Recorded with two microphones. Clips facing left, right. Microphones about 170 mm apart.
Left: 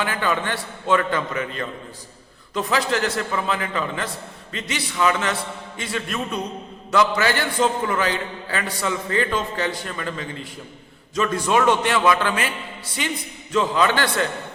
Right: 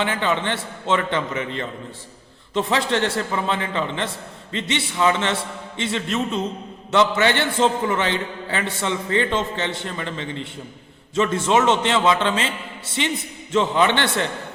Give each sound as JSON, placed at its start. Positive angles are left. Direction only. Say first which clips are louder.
{"t": 0.0, "sound": "a man's voice", "louder": "right 1 dB", "side_deg": -25}